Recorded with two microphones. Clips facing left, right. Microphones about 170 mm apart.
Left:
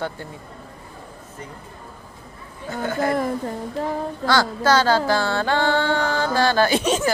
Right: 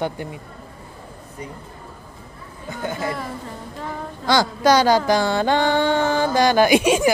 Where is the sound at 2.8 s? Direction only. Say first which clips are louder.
Left 3 dB; 20° right (ahead or behind).